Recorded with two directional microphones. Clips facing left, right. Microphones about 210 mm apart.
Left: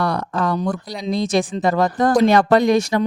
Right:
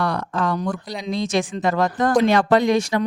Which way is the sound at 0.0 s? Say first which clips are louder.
Left 2 dB; 35° left (ahead or behind).